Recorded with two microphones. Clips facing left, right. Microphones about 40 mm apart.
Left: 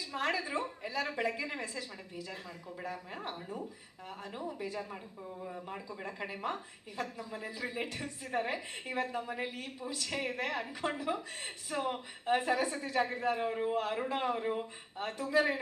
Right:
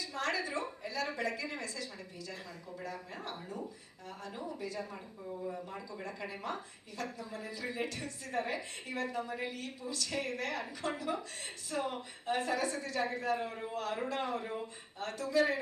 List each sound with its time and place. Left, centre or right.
0.0 s a woman's voice: centre